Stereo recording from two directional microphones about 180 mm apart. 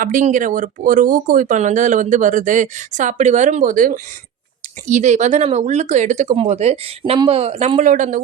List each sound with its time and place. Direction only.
0.0 s speech: 45° right (ahead or behind)